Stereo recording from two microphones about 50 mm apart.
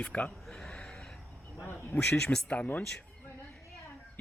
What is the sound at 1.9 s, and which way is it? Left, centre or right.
Speech, centre.